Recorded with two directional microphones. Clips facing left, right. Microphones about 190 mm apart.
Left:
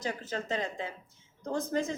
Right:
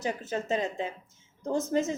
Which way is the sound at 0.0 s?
20° right (ahead or behind).